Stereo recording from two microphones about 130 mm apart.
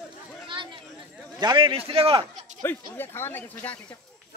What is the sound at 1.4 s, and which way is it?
Speech, 35° right (ahead or behind).